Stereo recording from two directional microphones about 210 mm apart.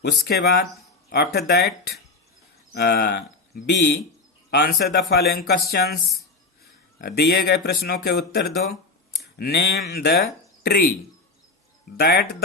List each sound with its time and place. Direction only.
0.3 s speech: 50° left (ahead or behind)
2.7 s speech: 50° left (ahead or behind)
7.0 s speech: 50° left (ahead or behind)
11.9 s speech: 50° left (ahead or behind)